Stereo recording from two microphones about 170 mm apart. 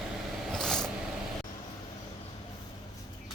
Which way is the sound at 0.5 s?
5° left (ahead or behind).